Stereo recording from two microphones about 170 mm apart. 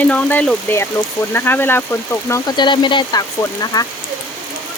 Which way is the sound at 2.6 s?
30° left (ahead or behind).